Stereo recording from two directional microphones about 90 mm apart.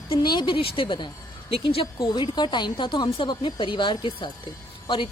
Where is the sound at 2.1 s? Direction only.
55° left (ahead or behind).